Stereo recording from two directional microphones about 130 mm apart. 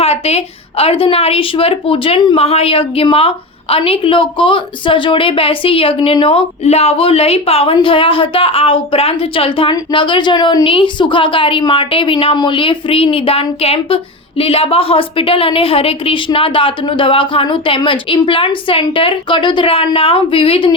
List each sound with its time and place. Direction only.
0.0 s a woman's voice: 50° left (ahead or behind)